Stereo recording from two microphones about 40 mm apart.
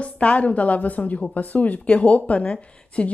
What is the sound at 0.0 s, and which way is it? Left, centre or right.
A woman's voice, left.